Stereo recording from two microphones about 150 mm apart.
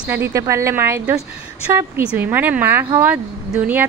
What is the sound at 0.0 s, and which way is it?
Speech, 15° right (ahead or behind).